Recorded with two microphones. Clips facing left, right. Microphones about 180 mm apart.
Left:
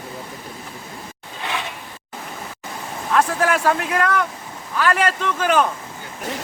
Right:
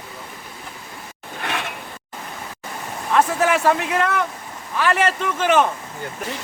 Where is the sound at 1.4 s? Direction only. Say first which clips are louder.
Even; 60° right (ahead or behind).